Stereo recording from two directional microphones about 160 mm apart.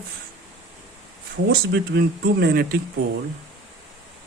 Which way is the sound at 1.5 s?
70° right (ahead or behind).